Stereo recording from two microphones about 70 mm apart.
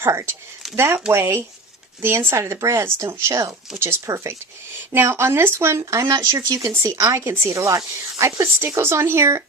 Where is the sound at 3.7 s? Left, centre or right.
Right.